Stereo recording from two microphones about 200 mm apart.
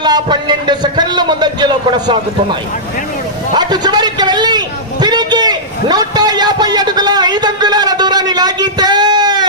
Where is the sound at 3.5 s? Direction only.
20° right (ahead or behind).